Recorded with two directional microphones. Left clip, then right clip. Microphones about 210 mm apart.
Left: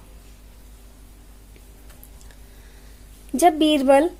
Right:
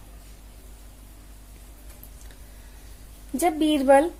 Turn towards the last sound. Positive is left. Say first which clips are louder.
# left 2 dB
turn(degrees=40)  # may be behind; listen again after turning